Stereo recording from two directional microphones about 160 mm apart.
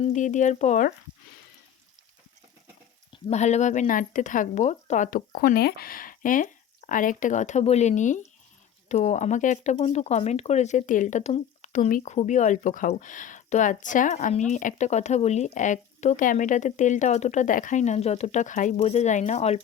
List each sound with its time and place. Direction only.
0.0 s speech: 50° left (ahead or behind)
3.1 s speech: 45° left (ahead or behind)